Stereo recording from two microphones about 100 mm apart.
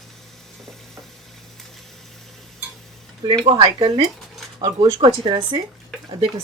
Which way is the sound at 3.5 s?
50° right (ahead or behind).